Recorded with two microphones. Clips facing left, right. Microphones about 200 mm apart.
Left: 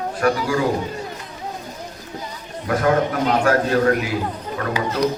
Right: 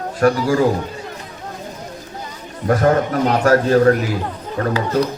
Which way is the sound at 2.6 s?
40° right (ahead or behind).